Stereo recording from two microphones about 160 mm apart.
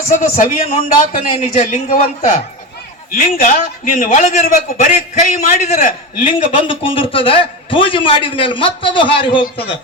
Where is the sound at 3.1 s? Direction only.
60° left (ahead or behind).